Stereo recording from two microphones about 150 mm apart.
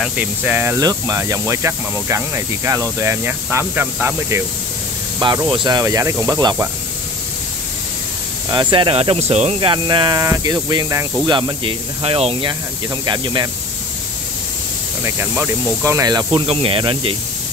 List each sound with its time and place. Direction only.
0.0 s speech: 10° right (ahead or behind)
5.2 s speech: 30° right (ahead or behind)
8.5 s speech: 30° right (ahead or behind)
15.0 s speech: 15° right (ahead or behind); by 17.1 s 35° right (ahead or behind)